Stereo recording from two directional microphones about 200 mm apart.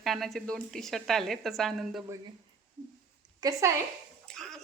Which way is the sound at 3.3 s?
20° right (ahead or behind).